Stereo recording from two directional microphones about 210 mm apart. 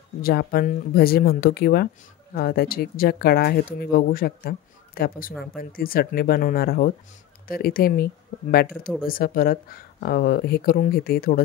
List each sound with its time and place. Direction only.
0.2 s speech: 45° left (ahead or behind)